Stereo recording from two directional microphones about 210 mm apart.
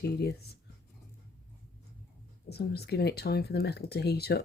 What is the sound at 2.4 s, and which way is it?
Speech, 50° left (ahead or behind).